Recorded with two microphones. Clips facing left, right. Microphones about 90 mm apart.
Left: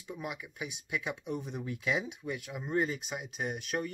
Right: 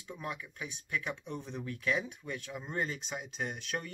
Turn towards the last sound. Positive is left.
turn(degrees=5)  # may be behind; listen again after turning